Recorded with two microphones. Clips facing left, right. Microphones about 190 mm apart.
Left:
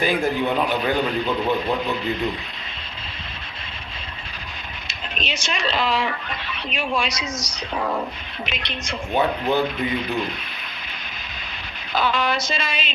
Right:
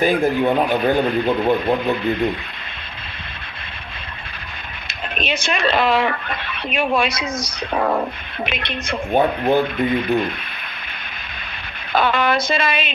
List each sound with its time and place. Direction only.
0.0 s speech: 50° right (ahead or behind)
4.9 s speech: 55° right (ahead or behind)
11.9 s speech: 55° right (ahead or behind)